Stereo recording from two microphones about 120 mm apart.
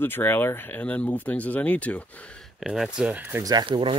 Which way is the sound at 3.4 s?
35° right (ahead or behind).